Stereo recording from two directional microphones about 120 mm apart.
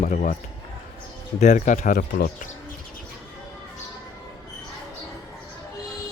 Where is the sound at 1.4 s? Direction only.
85° left.